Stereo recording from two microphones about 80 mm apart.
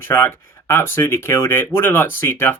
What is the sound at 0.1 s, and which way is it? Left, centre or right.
Speech, left.